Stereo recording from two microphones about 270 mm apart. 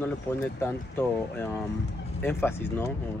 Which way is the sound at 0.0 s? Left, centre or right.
Centre.